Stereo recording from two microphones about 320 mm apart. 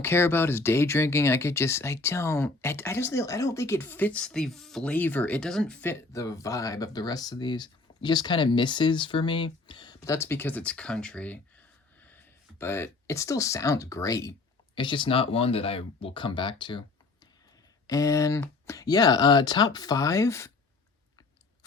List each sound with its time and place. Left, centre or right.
0.0 s speech: centre
17.8 s speech: centre